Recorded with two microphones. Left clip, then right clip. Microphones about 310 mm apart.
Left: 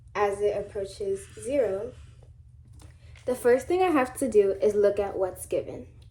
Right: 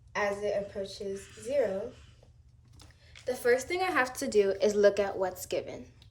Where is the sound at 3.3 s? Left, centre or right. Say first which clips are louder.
Left 5 dB; centre.